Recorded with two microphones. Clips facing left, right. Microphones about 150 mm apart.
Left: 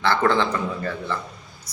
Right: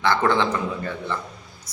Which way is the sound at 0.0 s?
15° right (ahead or behind).